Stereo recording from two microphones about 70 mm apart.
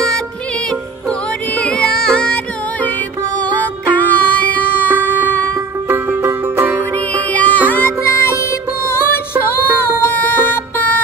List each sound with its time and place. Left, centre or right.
0.7 s music: centre
5.9 s music: right
6.6 s music: right
7.1 s music: left
8.0 s music: left
9.5 s music: left